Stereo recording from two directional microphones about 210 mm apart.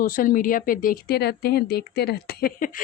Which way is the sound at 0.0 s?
40° left (ahead or behind).